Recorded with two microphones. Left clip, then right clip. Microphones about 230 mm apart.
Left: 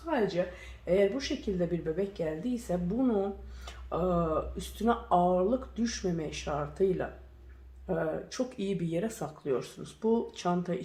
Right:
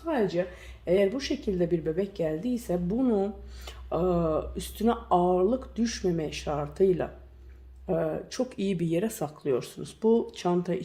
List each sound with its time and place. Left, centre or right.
0.9 s speech: right